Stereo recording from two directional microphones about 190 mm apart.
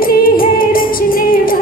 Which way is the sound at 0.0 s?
50° left (ahead or behind).